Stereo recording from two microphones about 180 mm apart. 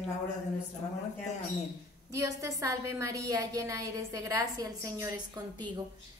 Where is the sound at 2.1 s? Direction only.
15° right (ahead or behind).